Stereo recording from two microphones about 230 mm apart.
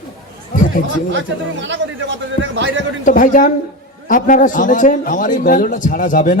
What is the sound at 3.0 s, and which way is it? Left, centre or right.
A man's voice, left.